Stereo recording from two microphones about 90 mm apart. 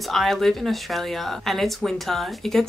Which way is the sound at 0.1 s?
Centre (ahead or behind).